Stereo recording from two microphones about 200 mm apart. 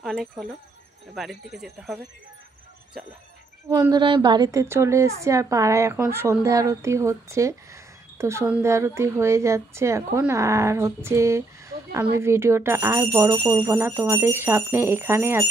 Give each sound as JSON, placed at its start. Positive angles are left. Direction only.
{"t": 0.0, "sound": "speech", "side_deg": 0}
{"t": 3.6, "sound": "speech", "side_deg": -15}